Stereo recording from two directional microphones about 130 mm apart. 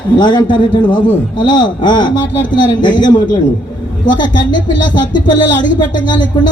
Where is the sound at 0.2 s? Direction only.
35° left (ahead or behind).